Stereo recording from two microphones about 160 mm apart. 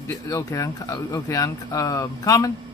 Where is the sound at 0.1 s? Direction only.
20° left (ahead or behind).